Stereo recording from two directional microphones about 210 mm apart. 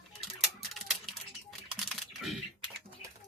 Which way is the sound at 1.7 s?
Centre (ahead or behind).